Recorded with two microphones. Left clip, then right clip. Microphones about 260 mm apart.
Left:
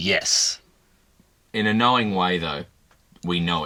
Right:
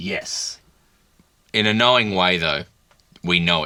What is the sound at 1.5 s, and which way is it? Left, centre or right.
Speech, right.